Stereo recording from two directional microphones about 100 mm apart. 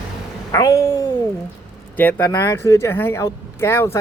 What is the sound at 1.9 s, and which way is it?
Speech, 20° left (ahead or behind).